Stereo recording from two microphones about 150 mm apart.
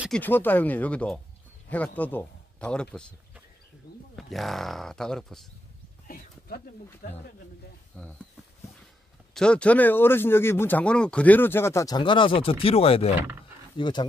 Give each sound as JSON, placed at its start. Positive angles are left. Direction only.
{"t": 0.1, "sound": "a man's voice", "side_deg": 10}
{"t": 3.9, "sound": "speech", "side_deg": 90}
{"t": 4.3, "sound": "speech", "side_deg": 0}
{"t": 6.0, "sound": "a sound", "side_deg": 80}
{"t": 7.9, "sound": "speech", "side_deg": 5}
{"t": 9.3, "sound": "speech", "side_deg": 5}
{"t": 13.7, "sound": "speech", "side_deg": 30}